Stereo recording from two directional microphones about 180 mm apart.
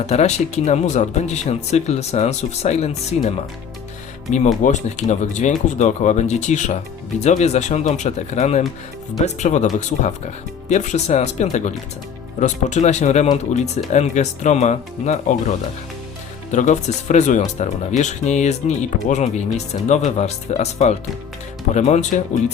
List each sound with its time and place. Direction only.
0.0 s speech: 35° left (ahead or behind)